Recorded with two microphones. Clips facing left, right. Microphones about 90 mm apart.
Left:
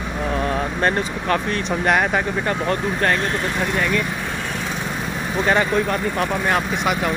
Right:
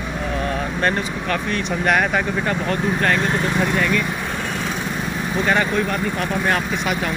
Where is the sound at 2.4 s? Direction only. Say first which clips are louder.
Even; 30° left (ahead or behind).